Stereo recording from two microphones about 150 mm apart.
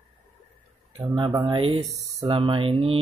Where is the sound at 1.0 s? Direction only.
35° right (ahead or behind).